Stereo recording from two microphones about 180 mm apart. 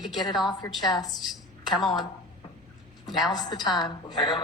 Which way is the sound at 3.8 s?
25° left (ahead or behind).